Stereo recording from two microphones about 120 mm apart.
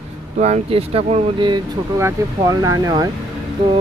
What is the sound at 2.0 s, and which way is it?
Speech, 30° right (ahead or behind).